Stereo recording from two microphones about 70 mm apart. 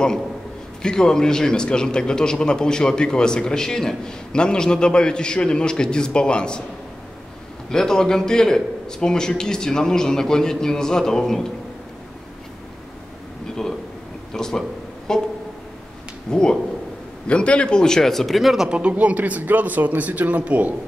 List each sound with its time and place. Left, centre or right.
0.8 s a man's voice: centre
7.7 s a man's voice: centre
14.3 s a sound: centre
16.3 s a man's voice: centre
18.7 s speech: centre